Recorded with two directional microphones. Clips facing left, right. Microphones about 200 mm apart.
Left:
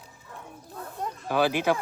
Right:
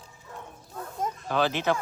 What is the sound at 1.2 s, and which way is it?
Speech, 10° left (ahead or behind).